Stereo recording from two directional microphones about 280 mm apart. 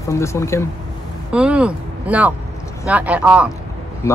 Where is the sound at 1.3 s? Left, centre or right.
Centre.